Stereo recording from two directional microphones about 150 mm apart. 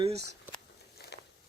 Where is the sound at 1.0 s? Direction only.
90° left.